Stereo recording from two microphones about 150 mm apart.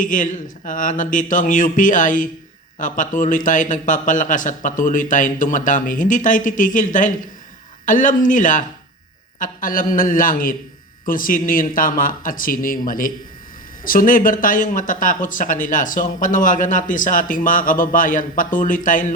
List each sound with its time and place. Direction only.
0.0 s speech: 60° left (ahead or behind)